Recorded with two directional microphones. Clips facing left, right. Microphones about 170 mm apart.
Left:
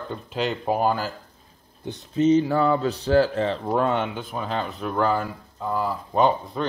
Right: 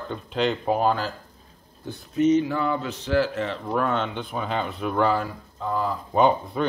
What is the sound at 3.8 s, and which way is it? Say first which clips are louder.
Speech: left 1 dB; 10° left (ahead or behind).